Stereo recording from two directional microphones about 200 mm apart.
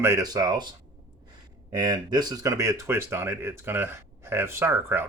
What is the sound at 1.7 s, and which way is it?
Speech, 20° right (ahead or behind).